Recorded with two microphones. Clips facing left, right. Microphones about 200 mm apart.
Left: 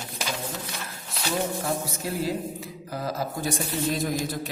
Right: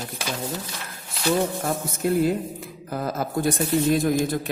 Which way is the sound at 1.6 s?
55° right (ahead or behind).